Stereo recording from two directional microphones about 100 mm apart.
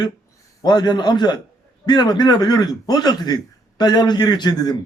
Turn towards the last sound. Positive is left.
turn(degrees=45)  # may be behind; listen again after turning